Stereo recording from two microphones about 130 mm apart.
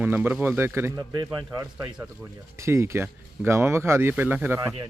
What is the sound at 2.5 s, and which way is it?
Speech, 20° right (ahead or behind).